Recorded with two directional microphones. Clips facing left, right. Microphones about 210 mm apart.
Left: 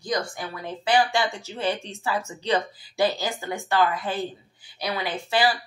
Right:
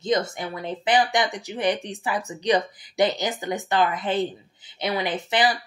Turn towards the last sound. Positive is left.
turn(degrees=-20)  # may be behind; listen again after turning